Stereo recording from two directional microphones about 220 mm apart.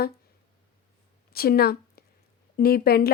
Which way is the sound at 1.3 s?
45° left (ahead or behind).